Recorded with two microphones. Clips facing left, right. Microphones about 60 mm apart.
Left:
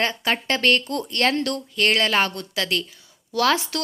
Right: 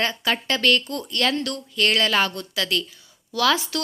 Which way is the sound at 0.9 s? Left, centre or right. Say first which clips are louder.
Left 2 dB; left.